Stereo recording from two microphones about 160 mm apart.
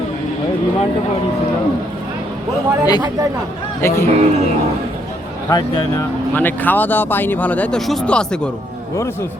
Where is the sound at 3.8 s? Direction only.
15° left (ahead or behind).